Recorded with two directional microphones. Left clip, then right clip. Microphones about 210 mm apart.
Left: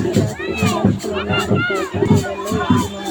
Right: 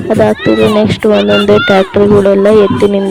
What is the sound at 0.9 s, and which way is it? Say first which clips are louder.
Speech: right 13 dB; 50° right (ahead or behind).